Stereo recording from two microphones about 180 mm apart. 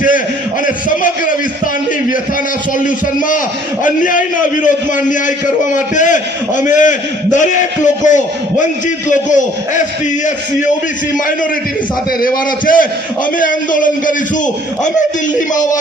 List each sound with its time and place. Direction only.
0.9 s a sound: 50° left (ahead or behind)
2.7 s a man's voice: 50° left (ahead or behind)
12.6 s a man's voice: 50° left (ahead or behind)